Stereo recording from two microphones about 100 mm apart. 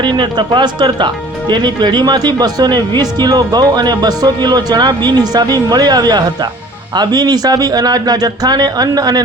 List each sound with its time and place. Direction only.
0.0 s speech: 50° right (ahead or behind)